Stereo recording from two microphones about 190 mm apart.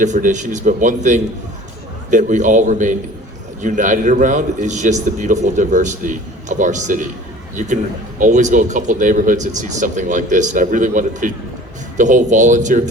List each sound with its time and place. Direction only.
0.0 s a man's voice: 40° right (ahead or behind)
8.2 s a man's voice: 40° right (ahead or behind)